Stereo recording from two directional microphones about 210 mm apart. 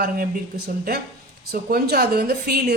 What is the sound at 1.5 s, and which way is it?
Speech, 45° right (ahead or behind).